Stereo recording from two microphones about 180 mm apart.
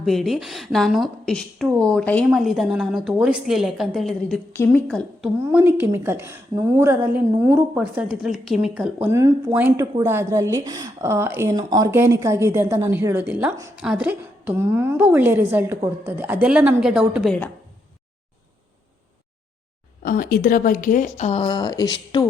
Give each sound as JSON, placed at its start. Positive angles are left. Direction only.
{"t": 0.0, "sound": "a woman's voice", "side_deg": 0}
{"t": 4.5, "sound": "a woman's voice", "side_deg": 10}
{"t": 5.4, "sound": "a woman's voice", "side_deg": -10}
{"t": 20.0, "sound": "speech", "side_deg": 50}